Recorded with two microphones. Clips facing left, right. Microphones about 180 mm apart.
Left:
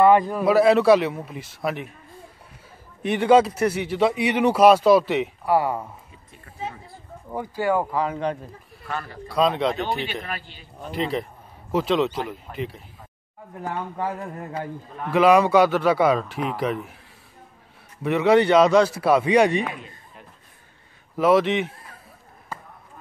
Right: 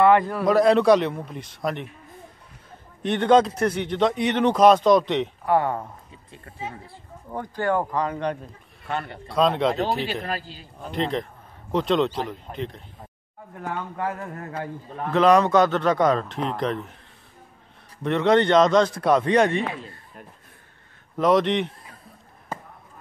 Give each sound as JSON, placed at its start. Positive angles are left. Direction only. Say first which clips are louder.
{"t": 0.0, "sound": "a man's voice", "louder": "left 1 dB", "side_deg": 15}
{"t": 3.0, "sound": "speech", "louder": "left 1 dB", "side_deg": 5}
{"t": 7.2, "sound": "speech", "louder": "left 1 dB", "side_deg": 10}
{"t": 8.8, "sound": "a man's voice", "louder": "right 2 dB", "side_deg": -25}
{"t": 9.3, "sound": "a man's voice", "louder": "even", "side_deg": 0}
{"t": 10.9, "sound": "a man's voice", "louder": "even", "side_deg": 5}
{"t": 18.0, "sound": "speech", "louder": "left 1 dB", "side_deg": 10}
{"t": 21.2, "sound": "a man's voice", "louder": "left 1 dB", "side_deg": 5}